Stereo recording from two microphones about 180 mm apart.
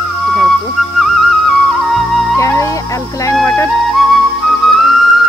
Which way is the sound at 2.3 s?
15° left (ahead or behind).